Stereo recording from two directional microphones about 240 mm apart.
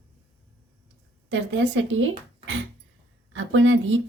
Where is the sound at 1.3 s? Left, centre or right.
Right.